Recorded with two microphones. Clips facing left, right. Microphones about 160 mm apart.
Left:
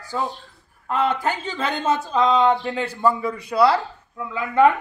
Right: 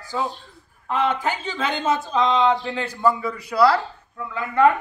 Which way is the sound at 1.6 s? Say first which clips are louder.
Even; centre (ahead or behind).